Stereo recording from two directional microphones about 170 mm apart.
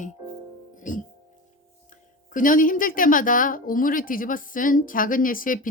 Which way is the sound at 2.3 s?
50° left (ahead or behind).